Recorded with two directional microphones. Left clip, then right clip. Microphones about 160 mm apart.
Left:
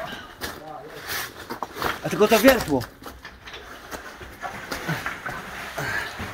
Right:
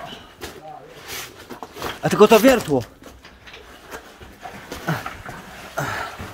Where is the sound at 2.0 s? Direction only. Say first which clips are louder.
Right 4 dB; 70° right (ahead or behind).